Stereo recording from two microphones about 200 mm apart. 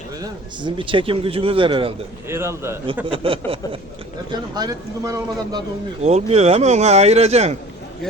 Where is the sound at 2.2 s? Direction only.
15° right (ahead or behind).